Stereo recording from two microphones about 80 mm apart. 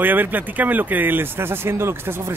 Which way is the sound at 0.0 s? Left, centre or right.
Right.